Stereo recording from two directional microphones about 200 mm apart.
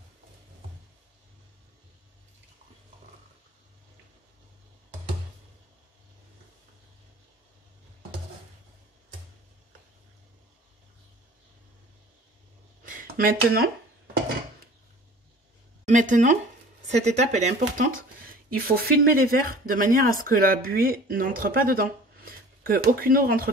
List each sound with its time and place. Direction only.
12.8 s a sound: 45° right (ahead or behind)
15.8 s speech: 40° right (ahead or behind)
18.5 s speech: 50° right (ahead or behind)